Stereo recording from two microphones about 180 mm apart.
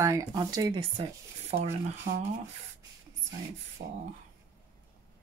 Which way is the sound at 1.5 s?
40° right (ahead or behind).